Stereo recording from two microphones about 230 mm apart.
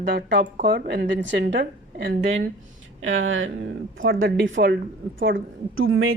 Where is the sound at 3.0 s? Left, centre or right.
Right.